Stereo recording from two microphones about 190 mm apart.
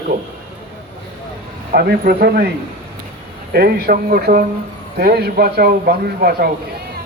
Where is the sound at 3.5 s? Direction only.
55° right (ahead or behind).